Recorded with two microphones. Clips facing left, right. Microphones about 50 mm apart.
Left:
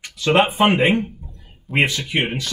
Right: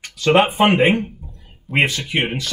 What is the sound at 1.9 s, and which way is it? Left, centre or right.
Speech, right.